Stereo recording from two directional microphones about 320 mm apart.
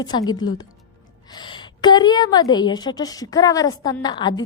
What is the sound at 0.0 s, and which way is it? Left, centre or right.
A woman's voice, centre.